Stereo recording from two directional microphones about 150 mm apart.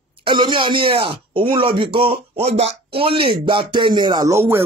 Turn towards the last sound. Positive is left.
turn(degrees=-15)  # may be behind; listen again after turning